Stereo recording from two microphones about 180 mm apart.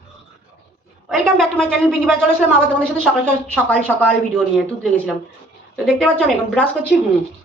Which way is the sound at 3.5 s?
10° left (ahead or behind).